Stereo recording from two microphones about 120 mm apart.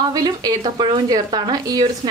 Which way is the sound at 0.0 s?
30° right (ahead or behind).